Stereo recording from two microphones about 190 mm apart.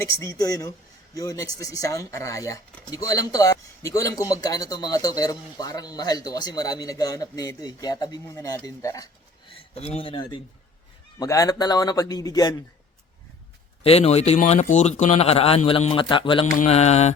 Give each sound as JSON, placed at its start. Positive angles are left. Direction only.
{"t": 0.0, "sound": "speech", "side_deg": 15}
{"t": 9.5, "sound": "speech", "side_deg": 30}
{"t": 13.8, "sound": "speech", "side_deg": 35}